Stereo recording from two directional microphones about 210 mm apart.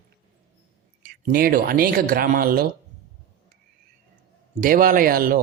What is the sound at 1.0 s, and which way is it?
Speech, 45° right (ahead or behind).